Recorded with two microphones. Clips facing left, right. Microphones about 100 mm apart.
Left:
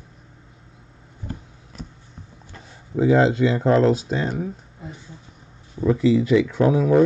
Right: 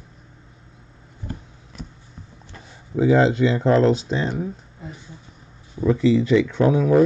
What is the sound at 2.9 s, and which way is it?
Speech, centre (ahead or behind).